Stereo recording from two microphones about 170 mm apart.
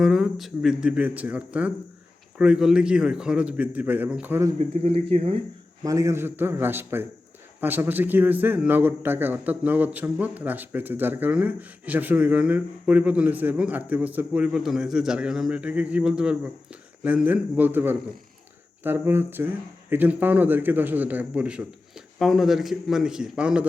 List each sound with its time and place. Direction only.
0.0 s a man's voice: centre (ahead or behind)
4.5 s speech: 40° right (ahead or behind)
5.8 s a man's voice: 20° right (ahead or behind)